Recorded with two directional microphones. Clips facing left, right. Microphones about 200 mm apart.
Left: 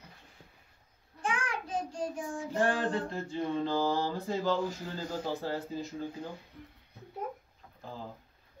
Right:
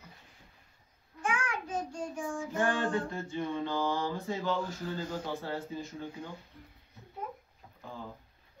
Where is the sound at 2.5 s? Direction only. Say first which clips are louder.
Left 1 dB; 35° left (ahead or behind).